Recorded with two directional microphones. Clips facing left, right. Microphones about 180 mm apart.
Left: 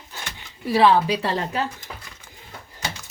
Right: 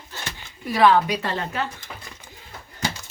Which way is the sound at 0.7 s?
30° left (ahead or behind).